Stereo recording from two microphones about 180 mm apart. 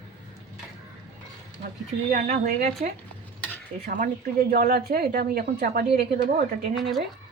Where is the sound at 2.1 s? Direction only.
45° right (ahead or behind).